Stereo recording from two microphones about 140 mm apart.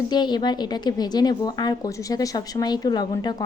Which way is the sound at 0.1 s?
30° left (ahead or behind).